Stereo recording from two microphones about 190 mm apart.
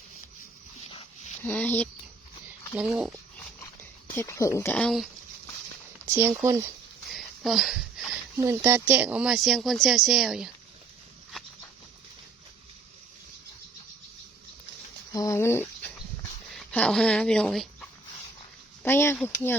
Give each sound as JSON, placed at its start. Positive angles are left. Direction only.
{"t": 0.9, "sound": "a sound", "side_deg": 30}
{"t": 1.5, "sound": "speech", "side_deg": 10}
{"t": 2.7, "sound": "speech", "side_deg": -5}
{"t": 4.1, "sound": "speech", "side_deg": 15}
{"t": 6.1, "sound": "speech", "side_deg": -15}
{"t": 7.1, "sound": "a sound", "side_deg": 0}
{"t": 8.4, "sound": "speech", "side_deg": -15}
{"t": 15.1, "sound": "speech", "side_deg": 15}
{"t": 18.8, "sound": "speech", "side_deg": 10}